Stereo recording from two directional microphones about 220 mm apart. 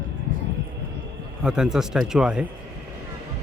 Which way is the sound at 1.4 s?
5° right (ahead or behind).